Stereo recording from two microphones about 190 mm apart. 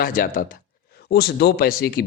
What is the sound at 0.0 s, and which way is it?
Speech, 45° left (ahead or behind).